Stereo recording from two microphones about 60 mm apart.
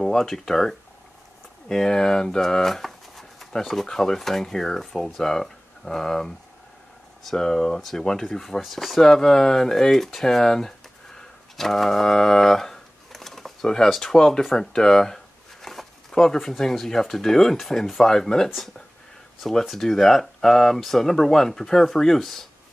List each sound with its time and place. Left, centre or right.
0.0 s speech: centre
11.1 s a sound: centre
13.8 s speech: centre